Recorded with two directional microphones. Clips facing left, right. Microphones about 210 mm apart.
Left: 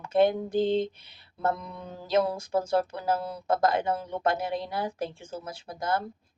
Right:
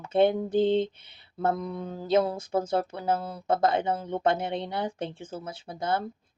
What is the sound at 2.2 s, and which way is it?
Speech, 25° right (ahead or behind).